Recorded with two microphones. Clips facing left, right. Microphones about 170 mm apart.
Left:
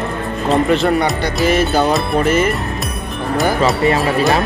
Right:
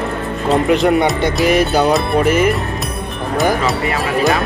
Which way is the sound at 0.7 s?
15° right (ahead or behind).